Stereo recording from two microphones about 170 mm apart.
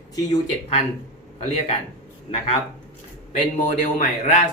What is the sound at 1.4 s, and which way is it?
Speech, 40° left (ahead or behind).